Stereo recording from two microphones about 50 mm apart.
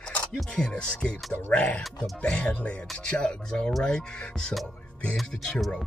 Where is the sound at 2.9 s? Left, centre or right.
Centre.